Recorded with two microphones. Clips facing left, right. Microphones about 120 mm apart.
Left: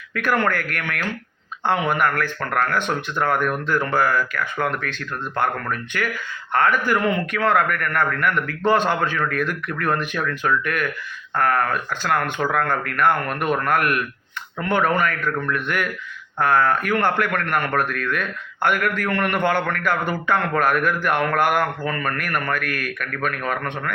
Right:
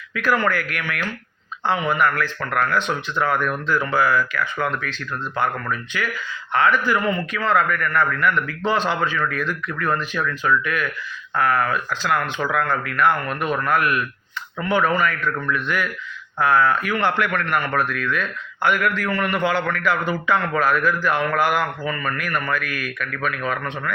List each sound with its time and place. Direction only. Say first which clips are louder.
0.1 s a man's voice: even; 60° left (ahead or behind)
7.0 s a man's voice: left 2 dB; 65° left (ahead or behind)